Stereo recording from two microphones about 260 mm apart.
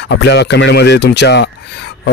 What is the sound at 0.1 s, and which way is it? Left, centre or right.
Speech, left.